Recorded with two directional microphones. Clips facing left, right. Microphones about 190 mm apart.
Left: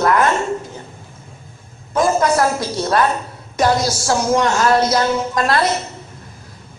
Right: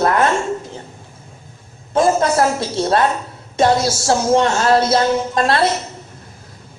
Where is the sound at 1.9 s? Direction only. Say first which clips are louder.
Right 1 dB; 25° right (ahead or behind).